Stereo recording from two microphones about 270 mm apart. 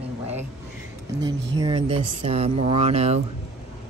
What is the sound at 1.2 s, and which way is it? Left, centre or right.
Speech, centre.